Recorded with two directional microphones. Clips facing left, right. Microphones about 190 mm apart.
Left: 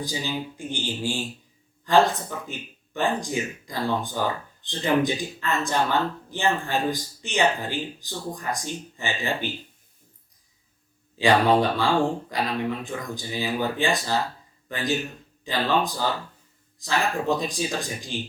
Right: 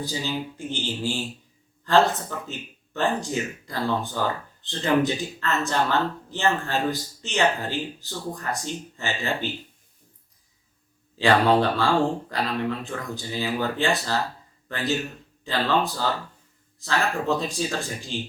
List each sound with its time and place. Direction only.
0.0 s speech: 15° left (ahead or behind)
11.2 s speech: 15° left (ahead or behind)